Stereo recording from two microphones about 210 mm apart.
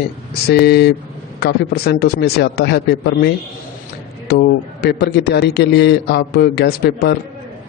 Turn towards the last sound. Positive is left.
turn(degrees=50)  # may be behind; listen again after turning